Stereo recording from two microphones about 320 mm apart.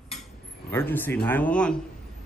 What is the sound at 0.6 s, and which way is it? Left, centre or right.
Speech, centre.